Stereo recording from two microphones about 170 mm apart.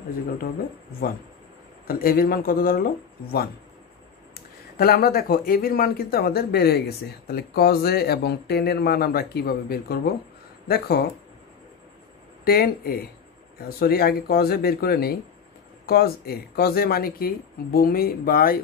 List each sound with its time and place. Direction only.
1.9 s speech: 60° left (ahead or behind)
12.4 s speech: 65° left (ahead or behind)